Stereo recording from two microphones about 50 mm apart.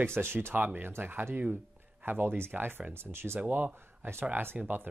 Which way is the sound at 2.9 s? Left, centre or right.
Right.